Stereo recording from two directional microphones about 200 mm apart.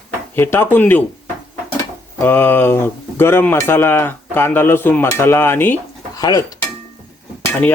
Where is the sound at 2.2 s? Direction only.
10° left (ahead or behind).